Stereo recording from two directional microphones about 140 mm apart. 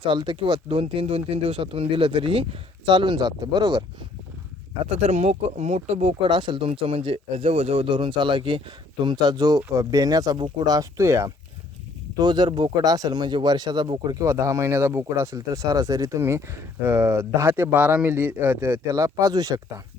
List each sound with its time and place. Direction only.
0.0 s speech: 35° right (ahead or behind)
4.9 s speech: 45° right (ahead or behind)
6.2 s speech: 35° right (ahead or behind)
10.8 s speech: 20° right (ahead or behind)
12.1 s speech: 30° right (ahead or behind); by 18.8 s 15° right (ahead or behind)
18.9 s speech: 25° right (ahead or behind)